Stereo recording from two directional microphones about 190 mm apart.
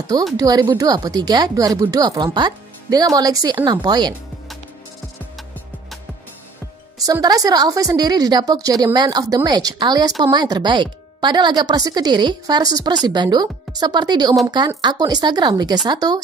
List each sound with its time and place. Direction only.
0.4 s speech: 20° right (ahead or behind)
7.0 s speech: 20° right (ahead or behind)